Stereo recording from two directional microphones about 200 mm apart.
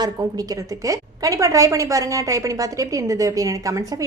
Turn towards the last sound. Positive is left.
turn(degrees=-15)  # may be behind; listen again after turning